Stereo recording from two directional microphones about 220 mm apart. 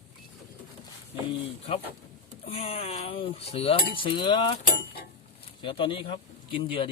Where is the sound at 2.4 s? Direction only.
25° left (ahead or behind).